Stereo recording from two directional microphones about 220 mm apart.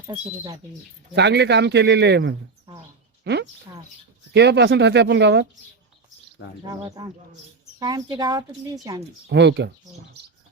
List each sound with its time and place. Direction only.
1.1 s speech: 50° right (ahead or behind)
6.7 s speech: 15° right (ahead or behind)
9.3 s speech: 50° right (ahead or behind)